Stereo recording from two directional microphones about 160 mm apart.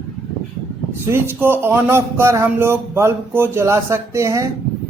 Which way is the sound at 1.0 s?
15° right (ahead or behind).